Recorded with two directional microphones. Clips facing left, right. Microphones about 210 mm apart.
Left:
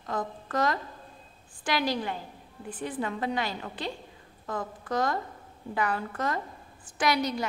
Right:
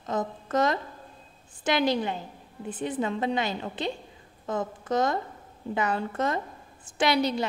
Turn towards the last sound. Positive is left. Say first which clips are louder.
# right 3 dB
turn(degrees=-25)  # may be behind; listen again after turning